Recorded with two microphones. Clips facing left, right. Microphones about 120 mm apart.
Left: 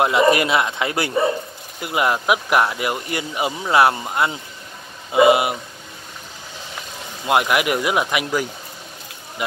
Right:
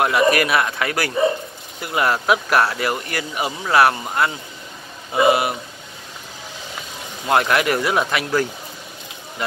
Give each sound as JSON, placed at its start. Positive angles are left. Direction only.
{"t": 0.0, "sound": "speech", "side_deg": 20}
{"t": 7.2, "sound": "speech", "side_deg": 15}